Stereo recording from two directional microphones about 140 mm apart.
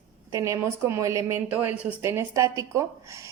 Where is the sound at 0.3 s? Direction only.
20° right (ahead or behind).